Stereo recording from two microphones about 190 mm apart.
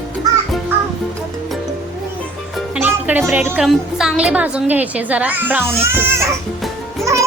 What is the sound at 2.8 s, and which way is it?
Music, 10° right (ahead or behind).